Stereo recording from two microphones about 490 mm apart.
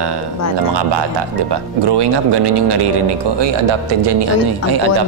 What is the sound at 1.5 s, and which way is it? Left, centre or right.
Speech, right.